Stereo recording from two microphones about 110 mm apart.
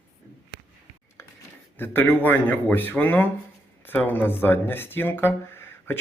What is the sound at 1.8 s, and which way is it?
A man's voice, 20° left (ahead or behind).